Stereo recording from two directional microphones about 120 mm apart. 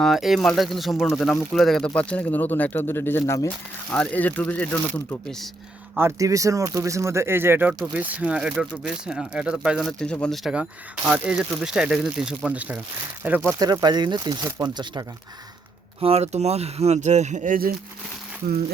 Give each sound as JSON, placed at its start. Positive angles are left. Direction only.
{"t": 0.0, "sound": "speech", "side_deg": 0}
{"t": 3.9, "sound": "speech", "side_deg": 10}
{"t": 6.0, "sound": "speech", "side_deg": -25}
{"t": 10.0, "sound": "speech", "side_deg": 10}
{"t": 10.5, "sound": "speech", "side_deg": -10}
{"t": 13.6, "sound": "speech", "side_deg": -35}
{"t": 16.0, "sound": "speech", "side_deg": -55}